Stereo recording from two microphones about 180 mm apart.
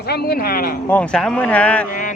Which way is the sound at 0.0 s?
60° left (ahead or behind).